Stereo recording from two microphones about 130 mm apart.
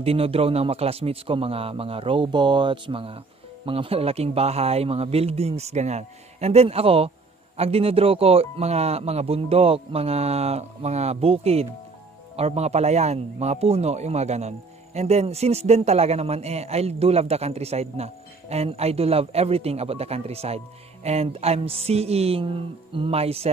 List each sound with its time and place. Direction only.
0.0 s a man's voice: 50° right (ahead or behind)